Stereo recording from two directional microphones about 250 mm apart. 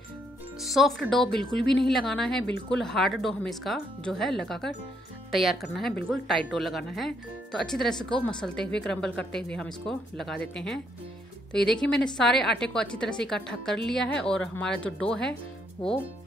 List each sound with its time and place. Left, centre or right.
0.6 s a woman's voice: centre